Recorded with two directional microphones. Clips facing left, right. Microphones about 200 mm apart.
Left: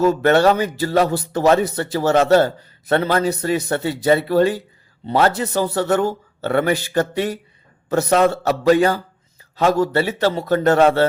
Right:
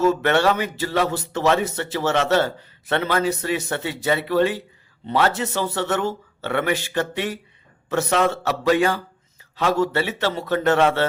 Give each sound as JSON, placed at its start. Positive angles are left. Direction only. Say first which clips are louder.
{"t": 0.1, "sound": "speech", "louder": "left 4 dB", "side_deg": 40}